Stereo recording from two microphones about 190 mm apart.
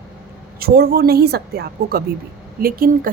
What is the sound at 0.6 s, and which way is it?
A woman's voice, 55° right (ahead or behind).